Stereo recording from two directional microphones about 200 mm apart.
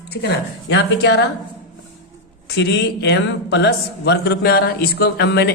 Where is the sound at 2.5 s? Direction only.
55° left (ahead or behind).